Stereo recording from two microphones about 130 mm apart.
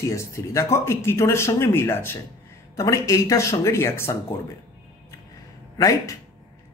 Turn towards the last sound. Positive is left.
turn(degrees=25)  # may be behind; listen again after turning